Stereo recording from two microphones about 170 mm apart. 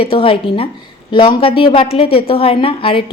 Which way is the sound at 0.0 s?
30° left (ahead or behind).